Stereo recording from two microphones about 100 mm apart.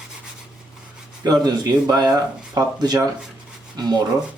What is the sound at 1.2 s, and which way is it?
Speech, 40° right (ahead or behind).